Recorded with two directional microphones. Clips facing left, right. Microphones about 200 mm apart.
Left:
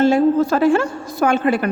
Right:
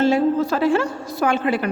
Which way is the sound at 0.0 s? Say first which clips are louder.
Left 3 dB; 50° left (ahead or behind).